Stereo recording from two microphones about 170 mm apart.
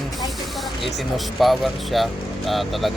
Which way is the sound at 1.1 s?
Centre (ahead or behind).